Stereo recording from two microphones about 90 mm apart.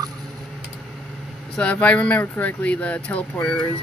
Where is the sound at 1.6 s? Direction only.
15° left (ahead or behind).